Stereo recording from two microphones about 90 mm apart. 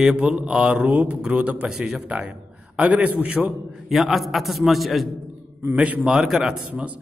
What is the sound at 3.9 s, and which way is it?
A man's voice, centre (ahead or behind).